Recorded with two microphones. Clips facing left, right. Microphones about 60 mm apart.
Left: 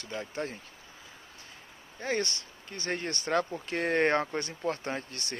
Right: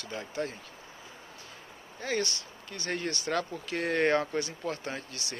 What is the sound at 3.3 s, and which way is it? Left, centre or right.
Speech, left.